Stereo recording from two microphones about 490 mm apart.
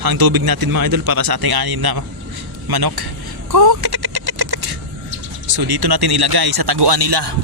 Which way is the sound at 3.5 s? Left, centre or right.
Right.